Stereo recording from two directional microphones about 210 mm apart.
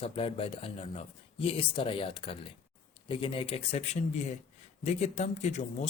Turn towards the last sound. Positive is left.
turn(degrees=35)  # may be behind; listen again after turning